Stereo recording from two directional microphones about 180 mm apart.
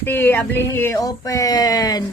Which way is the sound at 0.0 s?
10° left (ahead or behind).